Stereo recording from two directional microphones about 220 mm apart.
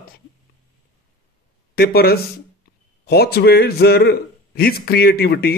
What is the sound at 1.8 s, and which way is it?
A man's voice, 45° left (ahead or behind).